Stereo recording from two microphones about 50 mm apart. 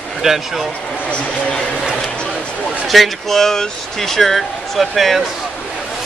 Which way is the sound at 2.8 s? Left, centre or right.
Centre.